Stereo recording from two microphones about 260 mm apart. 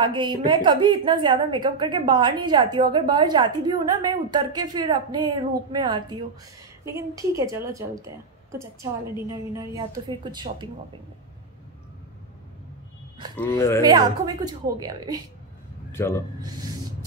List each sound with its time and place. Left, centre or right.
0.0 s a woman's voice: centre
13.5 s speech: centre
13.8 s a woman's voice: centre
15.9 s a man's voice: centre